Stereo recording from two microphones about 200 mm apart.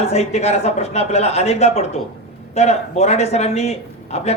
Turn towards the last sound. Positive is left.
turn(degrees=30)  # may be behind; listen again after turning